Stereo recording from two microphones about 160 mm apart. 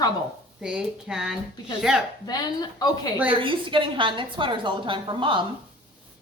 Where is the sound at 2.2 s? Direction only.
25° left (ahead or behind).